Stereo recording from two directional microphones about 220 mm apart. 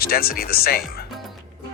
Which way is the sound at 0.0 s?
45° left (ahead or behind).